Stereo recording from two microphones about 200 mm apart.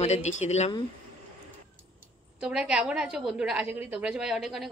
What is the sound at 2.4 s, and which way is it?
A woman's voice, 5° right (ahead or behind).